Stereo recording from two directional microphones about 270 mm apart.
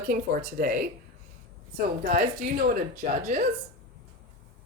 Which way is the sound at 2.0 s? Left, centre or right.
Right.